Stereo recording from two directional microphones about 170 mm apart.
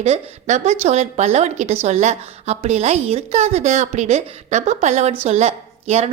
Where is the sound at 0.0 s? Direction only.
45° right (ahead or behind).